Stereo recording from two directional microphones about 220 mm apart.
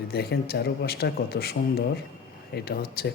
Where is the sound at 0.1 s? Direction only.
45° left (ahead or behind).